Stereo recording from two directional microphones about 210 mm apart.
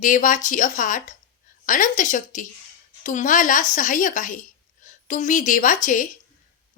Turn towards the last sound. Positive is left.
turn(degrees=40)  # may be behind; listen again after turning